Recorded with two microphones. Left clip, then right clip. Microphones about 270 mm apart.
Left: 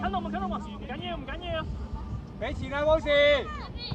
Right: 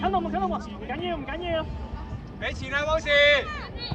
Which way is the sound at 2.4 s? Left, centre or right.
Right.